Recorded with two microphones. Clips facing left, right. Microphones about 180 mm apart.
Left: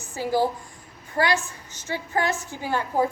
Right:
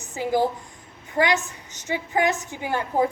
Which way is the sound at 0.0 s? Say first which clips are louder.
Right 1 dB; 20° right (ahead or behind).